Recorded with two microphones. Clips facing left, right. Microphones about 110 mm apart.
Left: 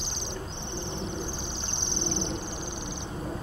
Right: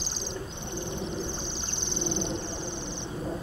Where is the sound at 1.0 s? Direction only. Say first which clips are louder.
Right 1 dB; centre (ahead or behind).